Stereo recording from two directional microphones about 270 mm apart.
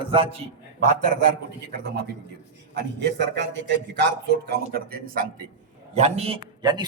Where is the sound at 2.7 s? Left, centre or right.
Right.